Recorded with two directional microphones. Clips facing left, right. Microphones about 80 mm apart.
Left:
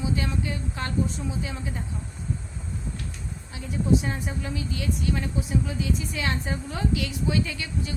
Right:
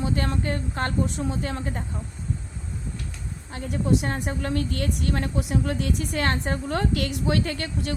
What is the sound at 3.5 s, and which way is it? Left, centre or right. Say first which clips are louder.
Speech: right 5 dB; right.